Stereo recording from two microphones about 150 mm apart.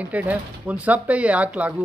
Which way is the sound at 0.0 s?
10° right (ahead or behind).